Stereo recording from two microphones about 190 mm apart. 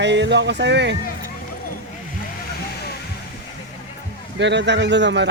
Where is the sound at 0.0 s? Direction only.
65° right (ahead or behind).